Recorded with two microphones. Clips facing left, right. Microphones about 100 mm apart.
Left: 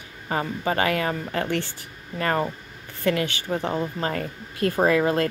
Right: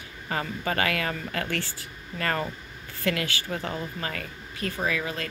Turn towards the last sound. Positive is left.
turn(degrees=45)  # may be behind; listen again after turning